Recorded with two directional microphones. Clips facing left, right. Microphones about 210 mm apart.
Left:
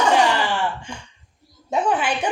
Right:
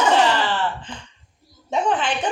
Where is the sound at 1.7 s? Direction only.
10° left (ahead or behind).